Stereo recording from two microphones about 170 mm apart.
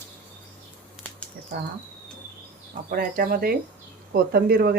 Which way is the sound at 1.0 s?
Centre (ahead or behind).